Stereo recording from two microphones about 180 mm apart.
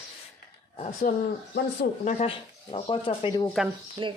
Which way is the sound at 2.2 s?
30° left (ahead or behind).